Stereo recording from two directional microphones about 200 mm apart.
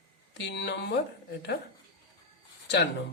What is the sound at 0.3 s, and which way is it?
Speech, 60° left (ahead or behind).